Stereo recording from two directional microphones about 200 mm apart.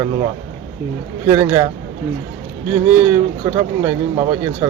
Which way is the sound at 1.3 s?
15° right (ahead or behind).